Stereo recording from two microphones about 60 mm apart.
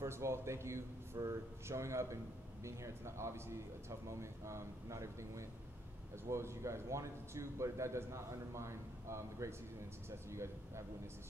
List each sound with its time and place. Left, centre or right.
0.0 s a man's voice: right